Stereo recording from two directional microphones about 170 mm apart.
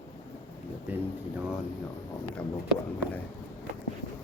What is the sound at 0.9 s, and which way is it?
Speech, 10° right (ahead or behind).